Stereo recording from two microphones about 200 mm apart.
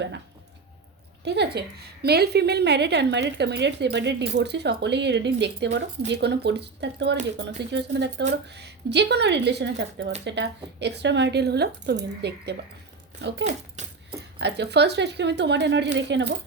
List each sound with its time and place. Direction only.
1.2 s a woman's voice: 55° right (ahead or behind)
13.4 s speech: 35° right (ahead or behind)
14.3 s a woman's voice: 55° right (ahead or behind)